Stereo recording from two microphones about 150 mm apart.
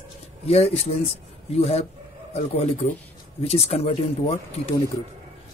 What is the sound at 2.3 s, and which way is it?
Speech, 45° left (ahead or behind).